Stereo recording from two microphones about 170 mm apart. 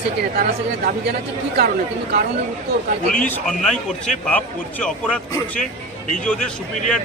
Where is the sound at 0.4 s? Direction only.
60° right (ahead or behind).